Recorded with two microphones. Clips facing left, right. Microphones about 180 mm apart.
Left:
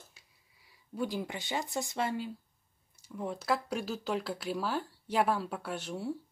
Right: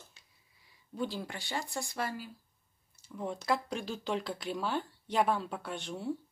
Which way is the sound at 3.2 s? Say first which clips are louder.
Even; 5° left (ahead or behind).